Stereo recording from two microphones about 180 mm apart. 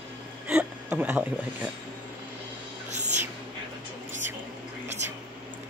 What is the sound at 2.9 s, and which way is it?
Music, 40° right (ahead or behind).